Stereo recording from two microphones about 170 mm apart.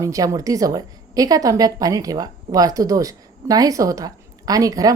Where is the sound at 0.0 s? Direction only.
20° right (ahead or behind).